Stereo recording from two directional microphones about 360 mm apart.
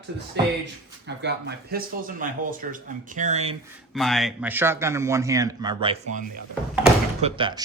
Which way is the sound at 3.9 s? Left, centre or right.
Centre.